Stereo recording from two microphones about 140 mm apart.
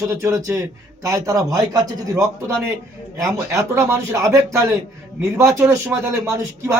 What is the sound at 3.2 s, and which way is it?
A man's voice, 20° right (ahead or behind).